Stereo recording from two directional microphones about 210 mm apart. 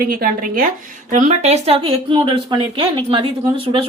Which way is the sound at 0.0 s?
45° right (ahead or behind).